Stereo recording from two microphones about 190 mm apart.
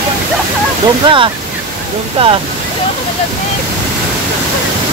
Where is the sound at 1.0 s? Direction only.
25° right (ahead or behind).